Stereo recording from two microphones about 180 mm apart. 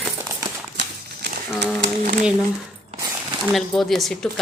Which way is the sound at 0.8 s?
75° right (ahead or behind).